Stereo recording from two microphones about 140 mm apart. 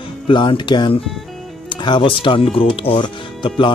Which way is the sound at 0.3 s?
35° left (ahead or behind).